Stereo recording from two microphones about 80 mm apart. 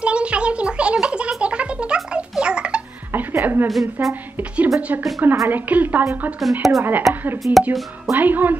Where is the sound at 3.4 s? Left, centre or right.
Right.